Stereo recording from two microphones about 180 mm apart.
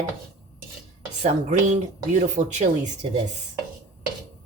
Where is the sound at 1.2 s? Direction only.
40° right (ahead or behind).